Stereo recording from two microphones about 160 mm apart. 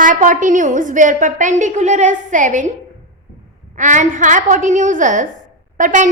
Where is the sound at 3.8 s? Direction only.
50° right (ahead or behind).